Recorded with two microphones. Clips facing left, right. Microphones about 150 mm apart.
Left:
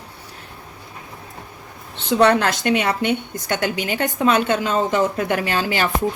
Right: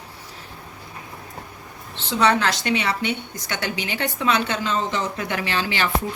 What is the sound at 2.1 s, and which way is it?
A woman's voice, 55° left (ahead or behind).